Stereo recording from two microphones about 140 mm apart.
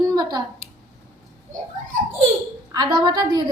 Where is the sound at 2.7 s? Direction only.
30° right (ahead or behind).